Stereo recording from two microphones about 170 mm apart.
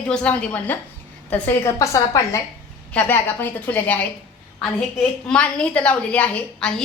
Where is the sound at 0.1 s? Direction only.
5° left (ahead or behind).